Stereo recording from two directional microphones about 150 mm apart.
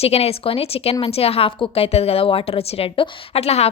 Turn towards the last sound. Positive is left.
turn(degrees=45)  # may be behind; listen again after turning